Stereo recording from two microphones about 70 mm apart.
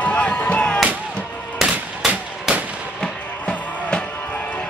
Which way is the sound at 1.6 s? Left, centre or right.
Centre.